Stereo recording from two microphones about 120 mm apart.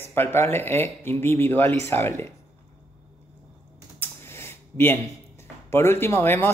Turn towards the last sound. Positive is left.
turn(degrees=20)  # may be behind; listen again after turning